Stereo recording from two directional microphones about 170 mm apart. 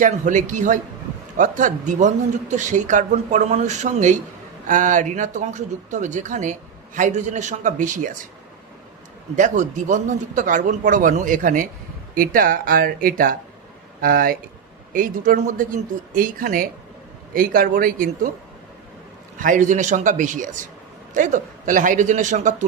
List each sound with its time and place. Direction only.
0.0 s speech: 50° right (ahead or behind)
9.3 s speech: 45° right (ahead or behind)
19.4 s speech: 50° right (ahead or behind)